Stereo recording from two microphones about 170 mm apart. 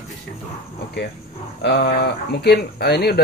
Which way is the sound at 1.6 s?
75° left (ahead or behind).